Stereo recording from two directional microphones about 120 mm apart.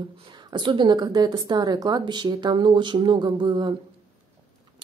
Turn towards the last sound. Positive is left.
turn(degrees=-40)  # may be behind; listen again after turning